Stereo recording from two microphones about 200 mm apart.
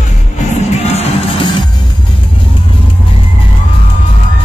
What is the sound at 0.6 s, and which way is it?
Music, 30° left (ahead or behind).